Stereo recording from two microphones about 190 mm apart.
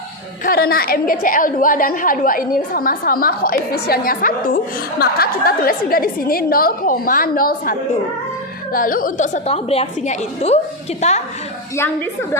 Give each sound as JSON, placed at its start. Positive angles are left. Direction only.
{"t": 0.4, "sound": "a woman's voice", "side_deg": 50}